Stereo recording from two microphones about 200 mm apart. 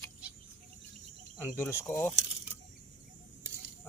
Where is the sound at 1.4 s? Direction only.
10° left (ahead or behind).